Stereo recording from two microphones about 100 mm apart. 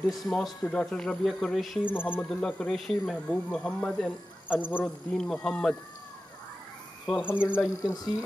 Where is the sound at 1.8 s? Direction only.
20° left (ahead or behind).